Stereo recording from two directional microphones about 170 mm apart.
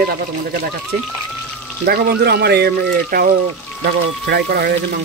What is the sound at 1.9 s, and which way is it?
Speech, 70° right (ahead or behind).